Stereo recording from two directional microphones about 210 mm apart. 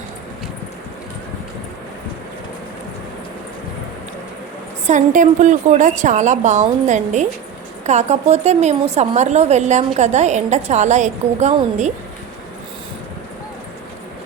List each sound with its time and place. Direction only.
4.9 s a woman's voice: 35° right (ahead or behind)